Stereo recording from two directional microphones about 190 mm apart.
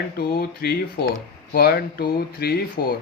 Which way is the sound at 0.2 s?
55° left (ahead or behind).